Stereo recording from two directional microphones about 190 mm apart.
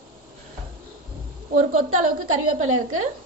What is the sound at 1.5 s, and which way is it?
Speech, 45° right (ahead or behind).